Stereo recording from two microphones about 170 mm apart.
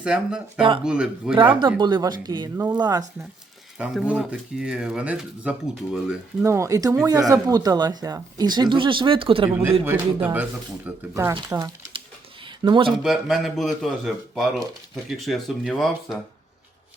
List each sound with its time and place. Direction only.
0.0 s speech: 5° right (ahead or behind)
1.4 s speech: 30° right (ahead or behind)
3.8 s speech: 5° right (ahead or behind); by 9.5 s 30° right (ahead or behind)
9.5 s speech: 15° right (ahead or behind)
12.5 s a sound: 25° right (ahead or behind)
13.0 s speech: centre (ahead or behind)